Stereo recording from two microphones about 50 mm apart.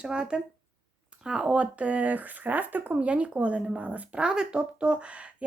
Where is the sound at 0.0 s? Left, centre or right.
Centre; by 3.0 s right.